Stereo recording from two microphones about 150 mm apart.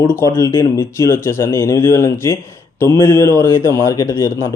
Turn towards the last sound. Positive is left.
turn(degrees=20)  # may be behind; listen again after turning